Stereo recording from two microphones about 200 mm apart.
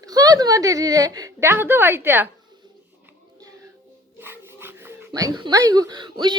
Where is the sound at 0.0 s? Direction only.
20° right (ahead or behind).